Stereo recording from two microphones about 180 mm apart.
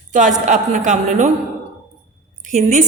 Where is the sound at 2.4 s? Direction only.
45° right (ahead or behind).